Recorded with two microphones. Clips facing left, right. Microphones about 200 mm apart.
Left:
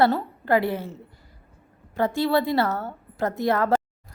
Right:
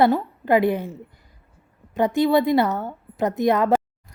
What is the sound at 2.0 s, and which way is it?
Speech, 15° right (ahead or behind).